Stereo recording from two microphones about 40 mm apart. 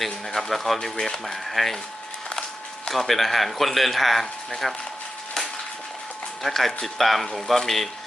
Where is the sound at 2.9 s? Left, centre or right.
Centre.